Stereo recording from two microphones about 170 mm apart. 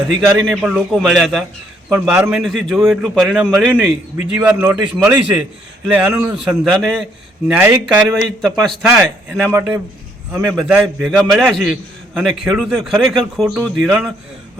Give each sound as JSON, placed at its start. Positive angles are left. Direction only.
{"t": 0.4, "sound": "a man's voice", "side_deg": -5}
{"t": 10.7, "sound": "a man's voice", "side_deg": -5}